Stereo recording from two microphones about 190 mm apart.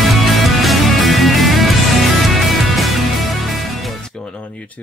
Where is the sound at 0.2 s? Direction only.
Centre (ahead or behind).